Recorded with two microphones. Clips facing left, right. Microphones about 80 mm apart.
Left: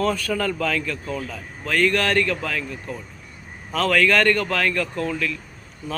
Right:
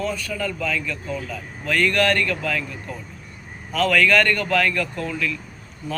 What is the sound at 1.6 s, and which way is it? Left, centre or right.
Speech, left.